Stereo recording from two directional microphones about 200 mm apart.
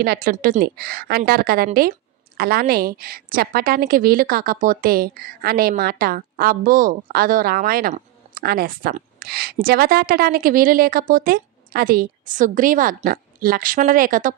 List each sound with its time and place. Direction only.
0.0 s a woman's voice: 50° right (ahead or behind)